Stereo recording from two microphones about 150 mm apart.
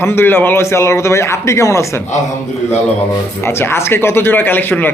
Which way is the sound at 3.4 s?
15° left (ahead or behind).